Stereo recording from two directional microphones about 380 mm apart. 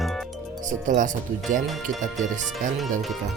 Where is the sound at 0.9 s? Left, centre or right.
Centre.